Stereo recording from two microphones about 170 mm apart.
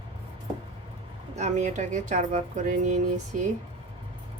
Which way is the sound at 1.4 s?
45° right (ahead or behind).